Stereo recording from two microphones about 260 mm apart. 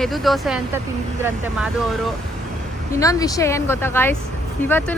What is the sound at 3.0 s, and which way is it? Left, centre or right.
Speech, centre.